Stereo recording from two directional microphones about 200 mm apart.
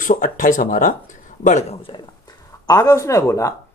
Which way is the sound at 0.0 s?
45° left (ahead or behind).